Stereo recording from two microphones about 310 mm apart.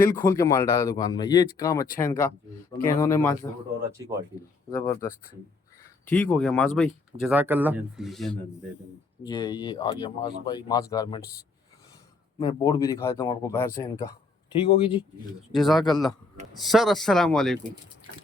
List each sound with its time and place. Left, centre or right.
0.0 s speech: centre
4.0 s speech: centre
4.7 s speech: centre
6.1 s speech: centre
9.2 s speech: centre
12.4 s speech: centre
15.5 s speech: centre